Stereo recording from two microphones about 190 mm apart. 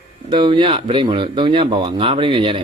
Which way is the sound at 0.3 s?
25° right (ahead or behind).